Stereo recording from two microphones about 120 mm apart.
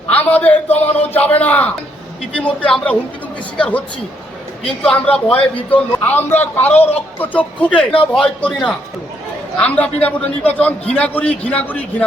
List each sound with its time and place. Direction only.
0.1 s a man's voice: 15° left (ahead or behind)